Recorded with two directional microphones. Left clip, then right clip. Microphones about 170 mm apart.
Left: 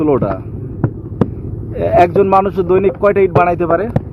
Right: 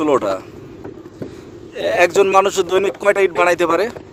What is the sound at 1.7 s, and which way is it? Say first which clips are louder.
A man's voice: left 3 dB; 30° right (ahead or behind).